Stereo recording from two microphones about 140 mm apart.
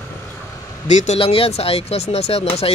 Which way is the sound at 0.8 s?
55° left (ahead or behind).